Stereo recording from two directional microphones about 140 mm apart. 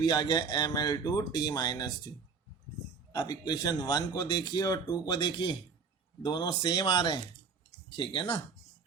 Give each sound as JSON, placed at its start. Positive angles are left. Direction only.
{"t": 0.0, "sound": "speech", "side_deg": 30}
{"t": 3.1, "sound": "speech", "side_deg": 30}